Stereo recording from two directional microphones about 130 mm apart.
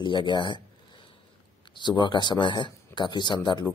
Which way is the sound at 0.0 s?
35° left (ahead or behind).